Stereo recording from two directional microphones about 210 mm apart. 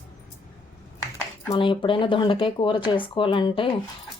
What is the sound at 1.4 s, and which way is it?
Speech, 20° left (ahead or behind).